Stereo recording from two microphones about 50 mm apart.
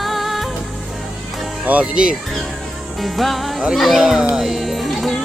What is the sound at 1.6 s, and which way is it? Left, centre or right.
Speech, right.